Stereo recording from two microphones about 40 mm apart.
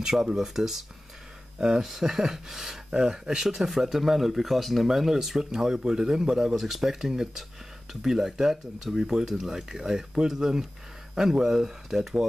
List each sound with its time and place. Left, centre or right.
0.0 s speech: centre
6.5 s speech: centre